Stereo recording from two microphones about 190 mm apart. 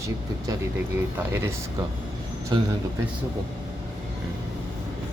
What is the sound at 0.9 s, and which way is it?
Speech, 10° right (ahead or behind).